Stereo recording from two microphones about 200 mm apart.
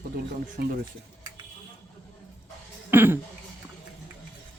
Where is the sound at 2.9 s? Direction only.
10° right (ahead or behind).